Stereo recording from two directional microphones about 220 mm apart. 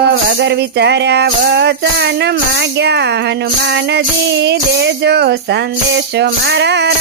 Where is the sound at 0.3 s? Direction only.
50° right (ahead or behind).